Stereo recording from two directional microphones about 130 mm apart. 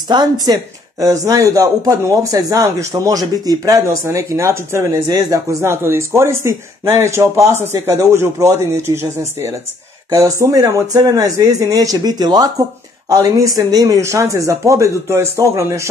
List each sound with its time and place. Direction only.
0.1 s speech: 30° right (ahead or behind)